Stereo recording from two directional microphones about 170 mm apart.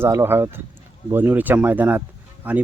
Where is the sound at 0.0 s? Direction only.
15° right (ahead or behind).